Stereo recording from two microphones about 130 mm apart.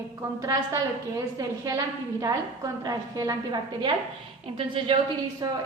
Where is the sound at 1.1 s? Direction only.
25° right (ahead or behind).